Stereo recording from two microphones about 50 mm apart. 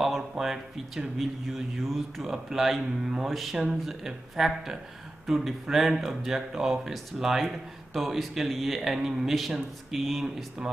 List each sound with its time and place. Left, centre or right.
0.0 s speech: centre